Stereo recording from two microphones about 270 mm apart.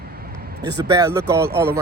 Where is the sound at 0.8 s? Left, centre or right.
Centre.